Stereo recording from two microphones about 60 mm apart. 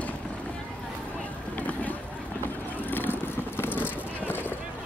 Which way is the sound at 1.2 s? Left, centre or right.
Left.